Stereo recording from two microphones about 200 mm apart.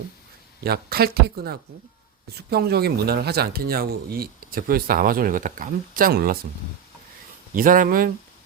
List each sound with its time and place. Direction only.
0.6 s speech: 50° right (ahead or behind)
7.5 s speech: 45° right (ahead or behind)